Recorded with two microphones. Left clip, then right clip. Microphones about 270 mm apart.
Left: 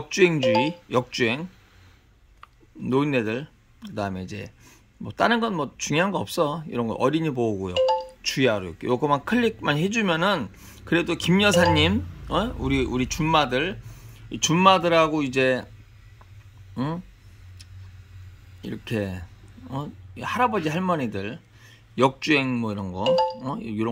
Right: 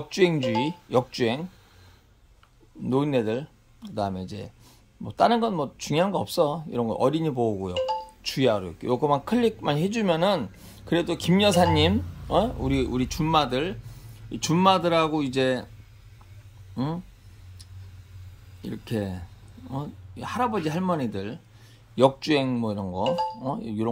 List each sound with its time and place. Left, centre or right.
0.1 s speech: centre
2.8 s speech: centre
16.7 s speech: centre
18.6 s speech: centre